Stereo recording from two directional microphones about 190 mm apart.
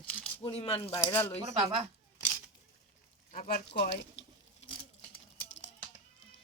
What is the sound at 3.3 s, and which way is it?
Speech, 45° left (ahead or behind).